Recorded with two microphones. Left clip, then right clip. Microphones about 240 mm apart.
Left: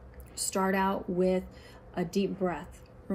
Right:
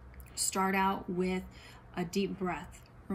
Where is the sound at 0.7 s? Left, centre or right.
Centre.